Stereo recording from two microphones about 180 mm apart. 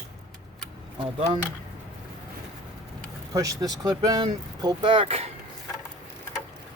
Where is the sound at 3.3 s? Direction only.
20° right (ahead or behind).